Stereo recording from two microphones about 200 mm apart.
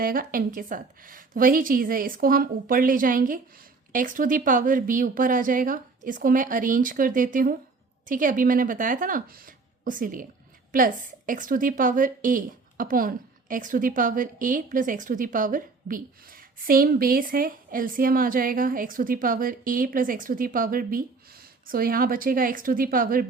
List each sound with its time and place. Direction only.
0.0 s a woman's voice: 45° right (ahead or behind)